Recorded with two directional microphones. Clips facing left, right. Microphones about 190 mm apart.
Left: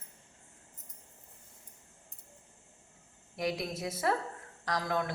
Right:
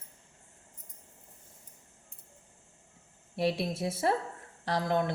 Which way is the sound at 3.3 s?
30° right (ahead or behind).